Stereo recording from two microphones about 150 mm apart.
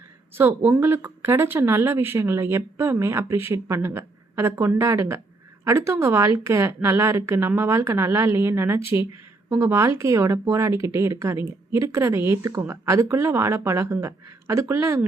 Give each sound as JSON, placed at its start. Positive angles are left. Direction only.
{"t": 0.3, "sound": "speech", "side_deg": -15}